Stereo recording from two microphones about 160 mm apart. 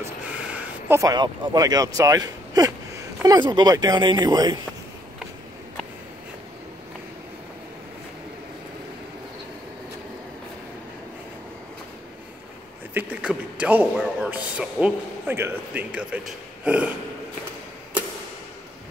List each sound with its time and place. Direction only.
0.0 s speech: 10° right (ahead or behind); by 4.6 s 25° right (ahead or behind)
12.9 s a man's voice: 5° right (ahead or behind)